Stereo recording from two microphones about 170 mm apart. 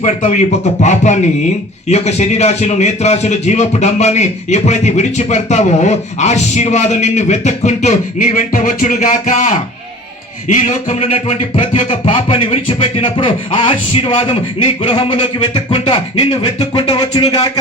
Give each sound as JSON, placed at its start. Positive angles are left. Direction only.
{"t": 0.0, "sound": "a man's voice", "side_deg": 40}
{"t": 16.7, "sound": "music", "side_deg": 25}